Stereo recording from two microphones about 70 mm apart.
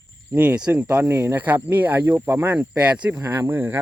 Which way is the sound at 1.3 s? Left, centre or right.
Right.